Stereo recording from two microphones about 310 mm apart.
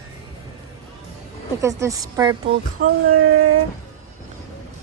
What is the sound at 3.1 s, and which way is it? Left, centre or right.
Speech, right.